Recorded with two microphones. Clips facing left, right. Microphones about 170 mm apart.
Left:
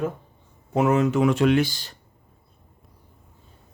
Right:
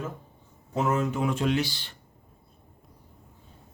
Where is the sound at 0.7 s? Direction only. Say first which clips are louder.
Left 7 dB; 75° left (ahead or behind).